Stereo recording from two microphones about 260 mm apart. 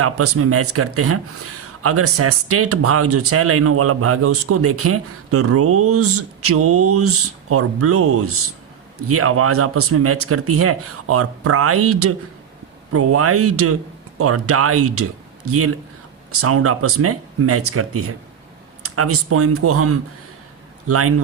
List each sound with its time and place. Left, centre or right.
0.0 s a man's voice: right